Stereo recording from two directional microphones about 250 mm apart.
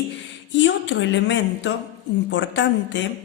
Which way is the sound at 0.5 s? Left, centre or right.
Left.